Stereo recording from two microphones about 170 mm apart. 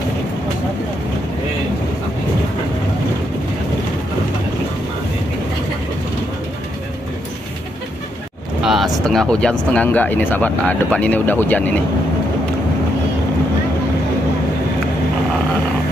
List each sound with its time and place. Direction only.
8.6 s speech: centre (ahead or behind)